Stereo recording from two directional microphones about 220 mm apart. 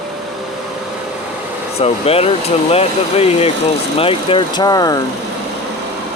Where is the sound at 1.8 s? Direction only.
25° left (ahead or behind).